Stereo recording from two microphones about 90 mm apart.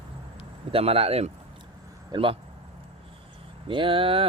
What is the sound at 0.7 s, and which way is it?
Speech, 90° right.